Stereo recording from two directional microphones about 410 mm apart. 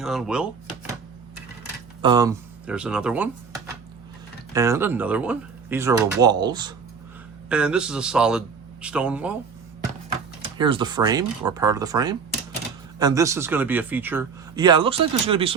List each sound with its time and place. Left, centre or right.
0.0 s speech: centre
2.0 s speech: centre
4.5 s a man's voice: centre
10.6 s speech: centre